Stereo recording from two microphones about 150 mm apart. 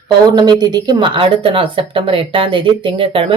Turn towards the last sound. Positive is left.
turn(degrees=-40)  # may be behind; listen again after turning